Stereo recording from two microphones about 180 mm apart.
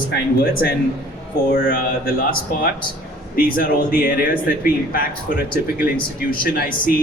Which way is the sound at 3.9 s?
55° left (ahead or behind).